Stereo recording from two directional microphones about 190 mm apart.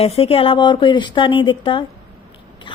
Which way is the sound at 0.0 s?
30° left (ahead or behind).